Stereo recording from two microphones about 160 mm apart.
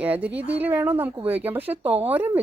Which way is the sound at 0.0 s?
10° right (ahead or behind).